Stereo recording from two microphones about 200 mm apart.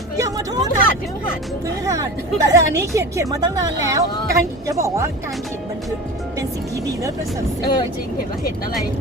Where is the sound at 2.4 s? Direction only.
15° right (ahead or behind).